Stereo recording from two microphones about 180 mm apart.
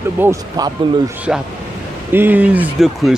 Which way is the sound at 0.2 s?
15° right (ahead or behind).